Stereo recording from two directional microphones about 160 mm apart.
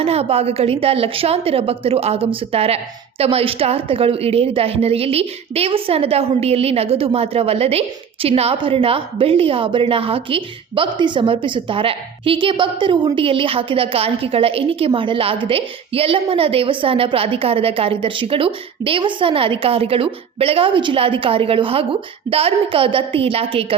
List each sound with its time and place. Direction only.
0.0 s a woman's voice: 40° right (ahead or behind)